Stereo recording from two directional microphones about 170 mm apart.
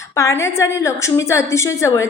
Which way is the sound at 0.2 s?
20° left (ahead or behind).